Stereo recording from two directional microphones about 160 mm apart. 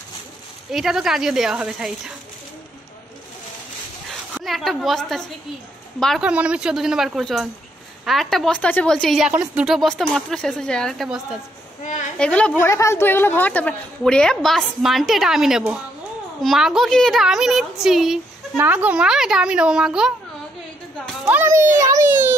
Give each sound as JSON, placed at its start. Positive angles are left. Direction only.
{"t": 0.7, "sound": "a woman's voice", "side_deg": -5}
{"t": 4.4, "sound": "a woman's voice", "side_deg": 0}
{"t": 11.8, "sound": "a woman's voice", "side_deg": 50}
{"t": 12.2, "sound": "a woman's voice", "side_deg": 5}
{"t": 12.6, "sound": "a woman's voice", "side_deg": 15}
{"t": 21.3, "sound": "a child's voice", "side_deg": -15}